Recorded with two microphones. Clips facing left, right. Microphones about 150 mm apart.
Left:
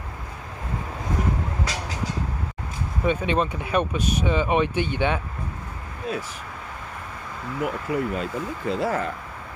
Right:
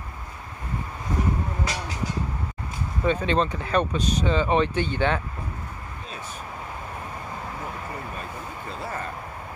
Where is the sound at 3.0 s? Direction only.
10° left (ahead or behind).